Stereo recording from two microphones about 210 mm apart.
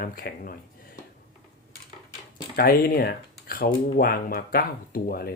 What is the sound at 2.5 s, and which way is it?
Speech, 45° left (ahead or behind).